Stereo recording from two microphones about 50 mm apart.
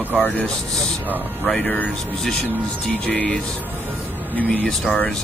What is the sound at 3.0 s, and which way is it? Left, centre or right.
Speech, centre.